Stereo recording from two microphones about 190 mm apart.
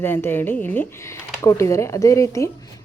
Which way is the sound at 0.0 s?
10° left (ahead or behind).